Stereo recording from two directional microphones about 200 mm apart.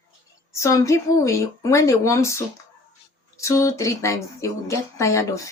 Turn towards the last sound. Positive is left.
turn(degrees=15)  # may be behind; listen again after turning